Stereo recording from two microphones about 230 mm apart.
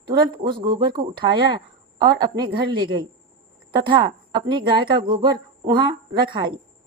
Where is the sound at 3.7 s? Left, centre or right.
Right.